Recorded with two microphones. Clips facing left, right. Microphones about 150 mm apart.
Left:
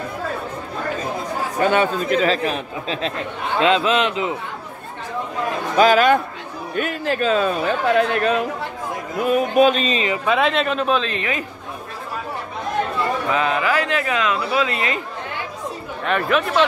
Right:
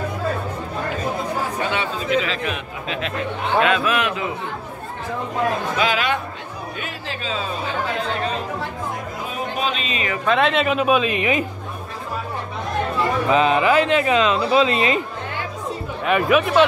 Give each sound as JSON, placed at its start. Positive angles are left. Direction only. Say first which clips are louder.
{"t": 1.6, "sound": "a man's voice", "louder": "left 6 dB", "side_deg": 45}
{"t": 5.8, "sound": "music", "louder": "left 11 dB", "side_deg": 45}
{"t": 6.7, "sound": "speech", "louder": "left 12 dB", "side_deg": 50}
{"t": 9.2, "sound": "music", "louder": "left 12 dB", "side_deg": 55}
{"t": 10.2, "sound": "speech", "louder": "right 2 dB", "side_deg": 5}
{"t": 13.3, "sound": "speech", "louder": "right 6 dB", "side_deg": -20}
{"t": 16.0, "sound": "speech", "louder": "right 2 dB", "side_deg": -10}